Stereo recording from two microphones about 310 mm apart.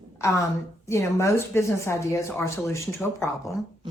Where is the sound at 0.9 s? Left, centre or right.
Centre.